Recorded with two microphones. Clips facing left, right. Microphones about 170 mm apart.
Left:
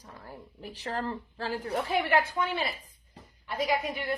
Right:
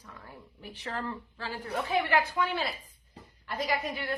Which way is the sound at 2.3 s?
20° left (ahead or behind).